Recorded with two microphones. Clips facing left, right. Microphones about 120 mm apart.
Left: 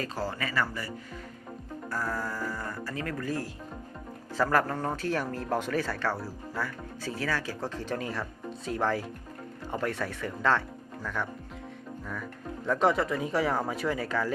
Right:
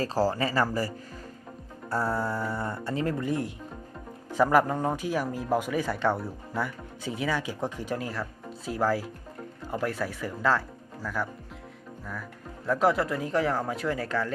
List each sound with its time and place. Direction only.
0.0 s speech: 35° right (ahead or behind); by 11.3 s 5° right (ahead or behind)
12.6 s speech: centre (ahead or behind)